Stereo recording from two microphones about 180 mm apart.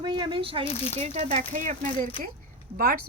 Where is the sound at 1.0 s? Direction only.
35° right (ahead or behind).